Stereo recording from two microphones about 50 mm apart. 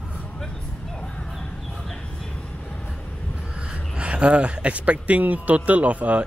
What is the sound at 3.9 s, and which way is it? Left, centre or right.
Speech, right.